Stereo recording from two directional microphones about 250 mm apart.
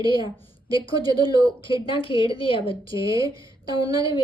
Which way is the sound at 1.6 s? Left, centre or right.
Centre.